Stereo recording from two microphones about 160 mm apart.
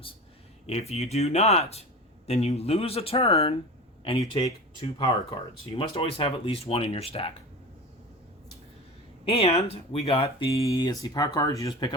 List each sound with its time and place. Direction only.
0.7 s speech: 40° left (ahead or behind)
4.2 s speech: 25° left (ahead or behind)
9.2 s speech: 35° left (ahead or behind)
10.5 s speech: 20° left (ahead or behind)